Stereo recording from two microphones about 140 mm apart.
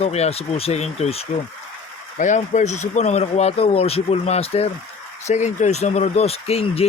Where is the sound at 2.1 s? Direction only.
60° left (ahead or behind); by 4.7 s 45° left (ahead or behind).